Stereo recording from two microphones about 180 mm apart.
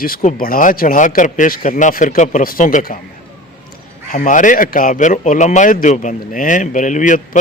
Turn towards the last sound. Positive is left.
turn(degrees=45)  # may be behind; listen again after turning